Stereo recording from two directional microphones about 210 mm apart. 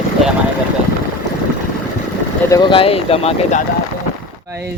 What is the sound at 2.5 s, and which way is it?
Speech, 20° left (ahead or behind).